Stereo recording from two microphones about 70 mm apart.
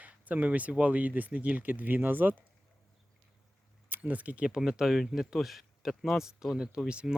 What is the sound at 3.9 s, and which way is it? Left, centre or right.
Speech, right.